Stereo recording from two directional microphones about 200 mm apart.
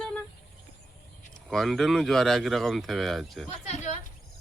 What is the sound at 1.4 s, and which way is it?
Speech, centre (ahead or behind).